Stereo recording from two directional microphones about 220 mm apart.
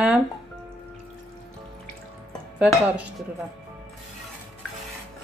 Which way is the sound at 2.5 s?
5° right (ahead or behind).